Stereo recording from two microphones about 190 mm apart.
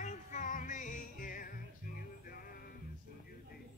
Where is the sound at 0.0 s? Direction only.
40° left (ahead or behind).